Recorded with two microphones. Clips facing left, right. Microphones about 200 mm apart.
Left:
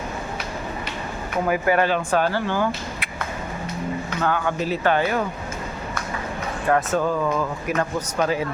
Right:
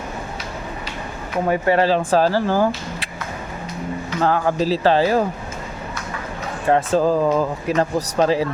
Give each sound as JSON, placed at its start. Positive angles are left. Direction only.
{"t": 1.5, "sound": "speech", "side_deg": -30}
{"t": 4.2, "sound": "speech", "side_deg": -35}
{"t": 6.7, "sound": "speech", "side_deg": -30}